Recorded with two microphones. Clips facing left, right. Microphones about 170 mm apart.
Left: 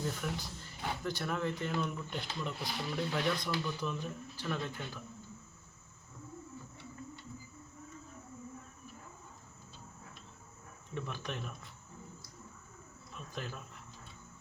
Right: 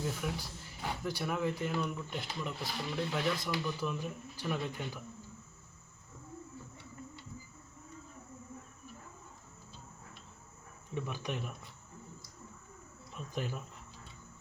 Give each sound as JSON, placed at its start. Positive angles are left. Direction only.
{"t": 0.0, "sound": "speech", "side_deg": -5}
{"t": 10.9, "sound": "speech", "side_deg": -10}
{"t": 13.3, "sound": "speech", "side_deg": -15}